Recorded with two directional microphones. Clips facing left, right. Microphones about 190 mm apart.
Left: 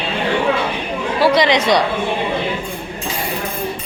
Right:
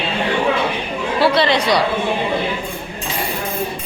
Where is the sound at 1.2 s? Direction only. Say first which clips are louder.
Left 2 dB; 15° left (ahead or behind).